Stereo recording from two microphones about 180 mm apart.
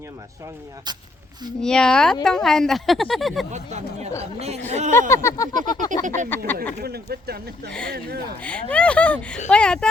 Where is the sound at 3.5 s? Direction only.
40° right (ahead or behind).